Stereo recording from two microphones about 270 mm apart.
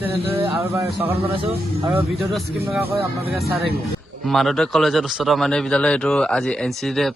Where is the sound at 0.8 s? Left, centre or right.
Right.